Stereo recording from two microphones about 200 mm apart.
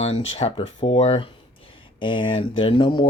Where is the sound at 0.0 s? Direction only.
30° left (ahead or behind).